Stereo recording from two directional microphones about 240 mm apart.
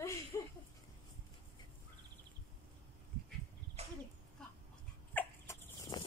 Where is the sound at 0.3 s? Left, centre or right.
Centre.